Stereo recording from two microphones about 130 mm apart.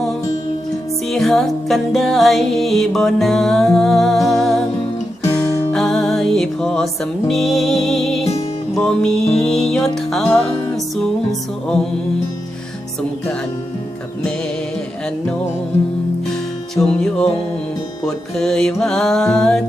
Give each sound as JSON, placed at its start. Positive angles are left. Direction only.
{"t": 1.0, "sound": "music", "side_deg": 5}
{"t": 5.2, "sound": "guitar", "side_deg": 25}
{"t": 5.7, "sound": "music", "side_deg": 5}
{"t": 16.7, "sound": "music", "side_deg": 5}